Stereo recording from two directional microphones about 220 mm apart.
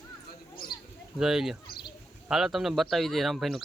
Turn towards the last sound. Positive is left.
turn(degrees=0)  # may be behind; listen again after turning